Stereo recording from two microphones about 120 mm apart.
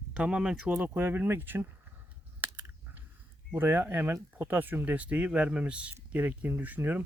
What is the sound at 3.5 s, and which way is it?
Speech, 15° right (ahead or behind).